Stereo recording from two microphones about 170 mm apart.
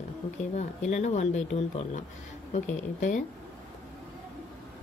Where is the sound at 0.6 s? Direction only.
40° left (ahead or behind).